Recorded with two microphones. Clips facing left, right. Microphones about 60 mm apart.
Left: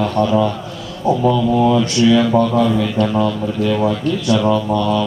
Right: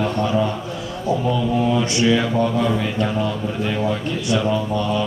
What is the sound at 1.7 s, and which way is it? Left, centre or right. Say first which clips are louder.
Speech: left 4 dB; right.